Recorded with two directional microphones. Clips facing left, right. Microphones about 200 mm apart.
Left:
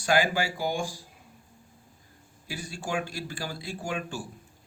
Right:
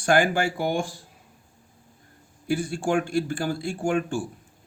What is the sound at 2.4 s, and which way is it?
Speech, 50° right (ahead or behind).